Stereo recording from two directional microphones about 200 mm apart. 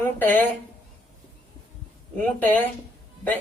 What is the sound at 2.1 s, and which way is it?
Speech, 10° left (ahead or behind).